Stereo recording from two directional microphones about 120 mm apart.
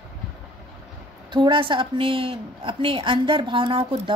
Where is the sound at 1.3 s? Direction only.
40° right (ahead or behind).